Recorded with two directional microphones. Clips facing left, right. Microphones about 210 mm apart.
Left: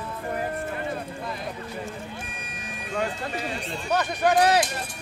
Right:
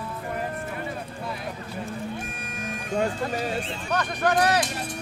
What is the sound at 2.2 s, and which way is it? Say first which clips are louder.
Music: right 4 dB; 45° right (ahead or behind).